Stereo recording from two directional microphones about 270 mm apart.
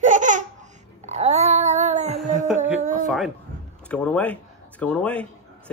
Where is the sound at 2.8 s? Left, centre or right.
Right.